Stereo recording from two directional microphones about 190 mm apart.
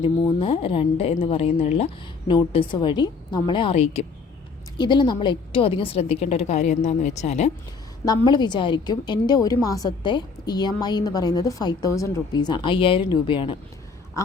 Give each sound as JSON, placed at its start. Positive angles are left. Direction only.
{"t": 0.0, "sound": "a woman's voice", "side_deg": 30}
{"t": 8.0, "sound": "a woman's voice", "side_deg": 20}